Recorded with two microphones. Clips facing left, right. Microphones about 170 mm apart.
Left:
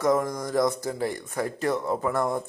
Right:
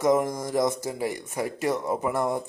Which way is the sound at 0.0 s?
20° right (ahead or behind).